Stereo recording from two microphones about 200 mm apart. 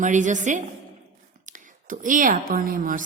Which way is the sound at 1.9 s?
40° right (ahead or behind).